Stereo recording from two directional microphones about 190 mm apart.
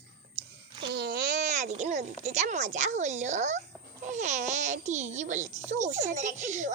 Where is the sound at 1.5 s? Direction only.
40° right (ahead or behind).